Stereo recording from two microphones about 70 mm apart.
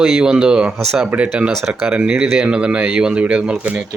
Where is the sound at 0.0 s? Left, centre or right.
Centre.